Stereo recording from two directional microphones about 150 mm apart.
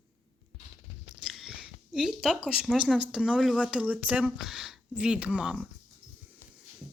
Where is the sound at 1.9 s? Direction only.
5° right (ahead or behind).